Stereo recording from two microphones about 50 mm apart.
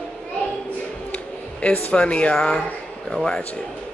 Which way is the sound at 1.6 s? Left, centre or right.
Left.